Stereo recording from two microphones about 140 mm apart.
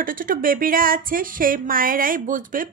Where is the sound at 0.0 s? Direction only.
80° right.